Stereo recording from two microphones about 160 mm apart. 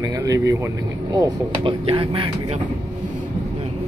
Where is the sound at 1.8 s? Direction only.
35° right (ahead or behind).